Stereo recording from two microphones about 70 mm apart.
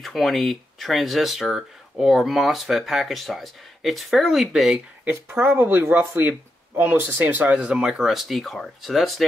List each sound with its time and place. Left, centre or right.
0.0 s speech: centre
4.6 s speech: centre